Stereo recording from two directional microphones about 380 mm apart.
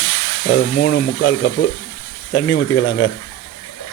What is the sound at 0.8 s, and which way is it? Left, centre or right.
A man's voice, left.